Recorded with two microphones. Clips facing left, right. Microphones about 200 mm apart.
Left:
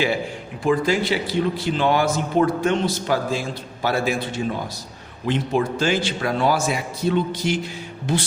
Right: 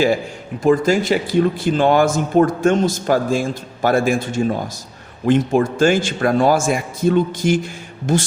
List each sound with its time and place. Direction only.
0.6 s speech: 45° right (ahead or behind)